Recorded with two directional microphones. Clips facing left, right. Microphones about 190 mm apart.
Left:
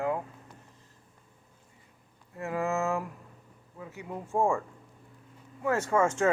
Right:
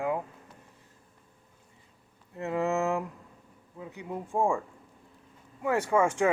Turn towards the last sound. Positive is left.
turn(degrees=-15)  # may be behind; listen again after turning